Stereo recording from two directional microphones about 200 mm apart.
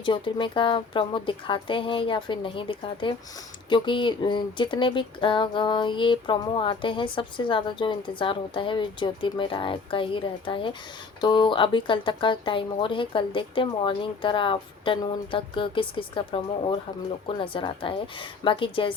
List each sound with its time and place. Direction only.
0.0 s speech: 25° left (ahead or behind)